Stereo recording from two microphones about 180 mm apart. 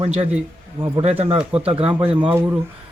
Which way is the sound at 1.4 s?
5° right (ahead or behind).